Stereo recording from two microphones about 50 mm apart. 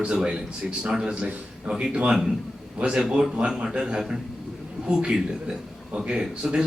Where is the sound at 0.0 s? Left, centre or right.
Centre.